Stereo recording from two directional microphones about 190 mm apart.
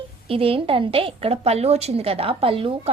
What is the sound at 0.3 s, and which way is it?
A woman's voice, 30° right (ahead or behind).